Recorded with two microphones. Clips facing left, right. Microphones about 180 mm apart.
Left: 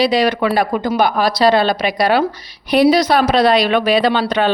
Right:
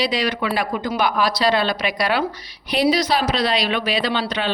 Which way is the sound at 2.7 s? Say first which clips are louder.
Left 6 dB; 55° left (ahead or behind).